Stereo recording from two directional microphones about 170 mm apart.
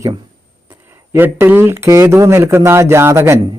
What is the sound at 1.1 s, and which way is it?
A man's voice, 15° right (ahead or behind).